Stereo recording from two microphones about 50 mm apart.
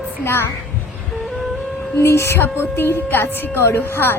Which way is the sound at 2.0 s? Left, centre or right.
Left.